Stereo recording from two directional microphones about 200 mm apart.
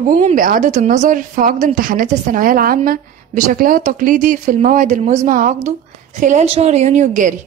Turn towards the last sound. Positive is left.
turn(degrees=-40)  # may be behind; listen again after turning